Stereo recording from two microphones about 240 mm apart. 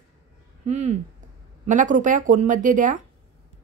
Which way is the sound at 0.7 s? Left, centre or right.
Right.